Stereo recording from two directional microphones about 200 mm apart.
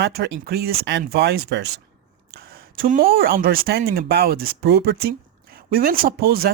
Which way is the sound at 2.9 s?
45° right (ahead or behind).